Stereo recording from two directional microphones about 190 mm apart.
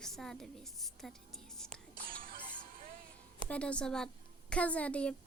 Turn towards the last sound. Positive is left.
turn(degrees=5)  # may be behind; listen again after turning